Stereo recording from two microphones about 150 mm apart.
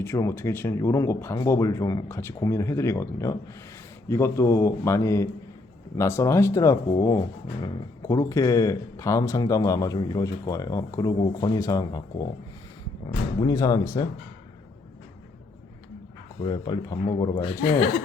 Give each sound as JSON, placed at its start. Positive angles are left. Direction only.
{"t": 0.0, "sound": "speech", "side_deg": 20}
{"t": 16.4, "sound": "speech", "side_deg": 30}